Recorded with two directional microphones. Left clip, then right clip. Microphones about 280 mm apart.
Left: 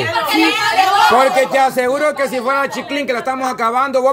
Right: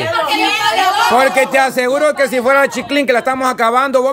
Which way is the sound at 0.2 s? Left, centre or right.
Left.